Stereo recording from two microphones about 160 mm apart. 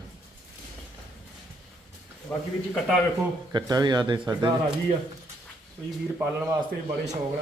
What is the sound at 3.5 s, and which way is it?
A man's voice, 25° right (ahead or behind).